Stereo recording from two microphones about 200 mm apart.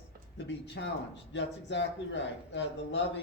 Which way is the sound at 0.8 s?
60° left (ahead or behind).